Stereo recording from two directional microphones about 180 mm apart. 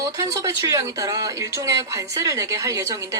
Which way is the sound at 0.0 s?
20° right (ahead or behind).